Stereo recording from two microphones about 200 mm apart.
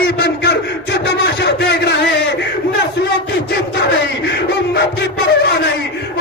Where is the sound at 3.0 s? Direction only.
60° left (ahead or behind).